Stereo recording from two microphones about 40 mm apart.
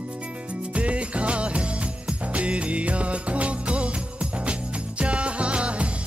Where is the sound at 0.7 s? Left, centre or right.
Right.